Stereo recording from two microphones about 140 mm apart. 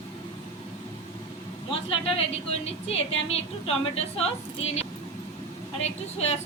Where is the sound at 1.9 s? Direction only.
45° left (ahead or behind).